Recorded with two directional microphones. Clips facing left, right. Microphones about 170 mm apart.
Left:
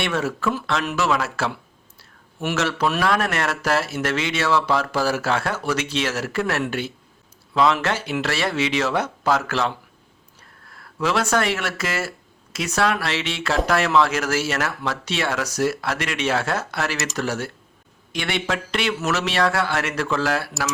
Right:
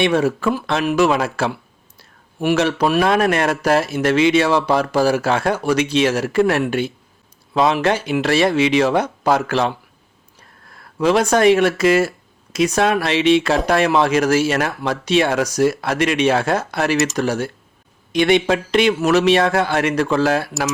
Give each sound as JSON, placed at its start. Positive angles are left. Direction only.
{"t": 0.4, "sound": "speech", "side_deg": -20}
{"t": 11.0, "sound": "speech", "side_deg": -20}